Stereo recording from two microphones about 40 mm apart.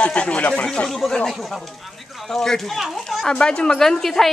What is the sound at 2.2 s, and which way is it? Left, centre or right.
Speech, centre.